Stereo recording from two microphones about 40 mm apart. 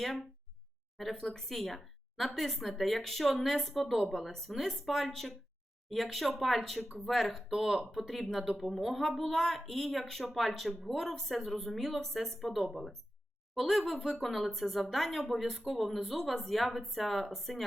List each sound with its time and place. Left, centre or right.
1.1 s a woman's voice: centre
7.3 s speech: centre
8.0 s a woman's voice: centre